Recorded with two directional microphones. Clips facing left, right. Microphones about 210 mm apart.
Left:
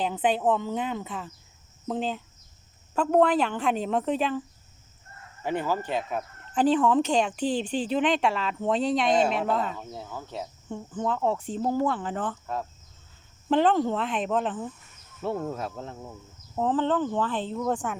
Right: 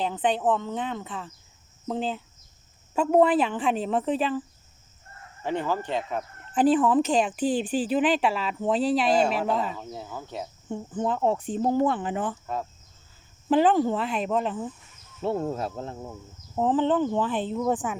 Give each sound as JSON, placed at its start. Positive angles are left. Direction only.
{"t": 0.0, "sound": "speech", "side_deg": 5}
{"t": 5.4, "sound": "speech", "side_deg": 10}
{"t": 6.5, "sound": "speech", "side_deg": -5}
{"t": 15.2, "sound": "speech", "side_deg": -30}
{"t": 16.6, "sound": "speech", "side_deg": -15}